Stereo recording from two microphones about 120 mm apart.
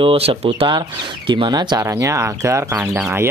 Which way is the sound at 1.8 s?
25° right (ahead or behind).